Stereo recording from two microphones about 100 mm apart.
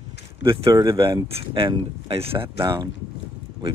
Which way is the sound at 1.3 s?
60° right (ahead or behind).